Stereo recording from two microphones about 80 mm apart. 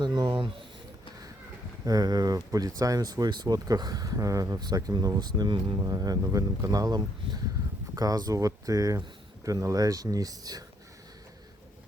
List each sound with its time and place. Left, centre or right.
0.0 s a sound: right
1.8 s speech: right
5.7 s speech: right